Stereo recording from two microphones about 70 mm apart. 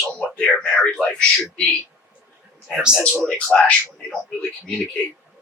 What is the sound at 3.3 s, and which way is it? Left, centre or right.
Speech, centre.